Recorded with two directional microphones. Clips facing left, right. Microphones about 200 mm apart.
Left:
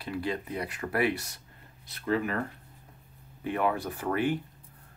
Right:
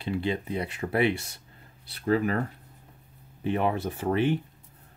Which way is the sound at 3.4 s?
25° right (ahead or behind).